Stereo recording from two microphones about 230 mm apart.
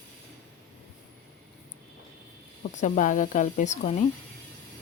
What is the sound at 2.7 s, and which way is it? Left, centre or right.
Speech, left.